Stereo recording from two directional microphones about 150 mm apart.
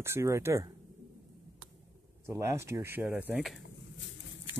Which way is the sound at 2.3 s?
20° right (ahead or behind).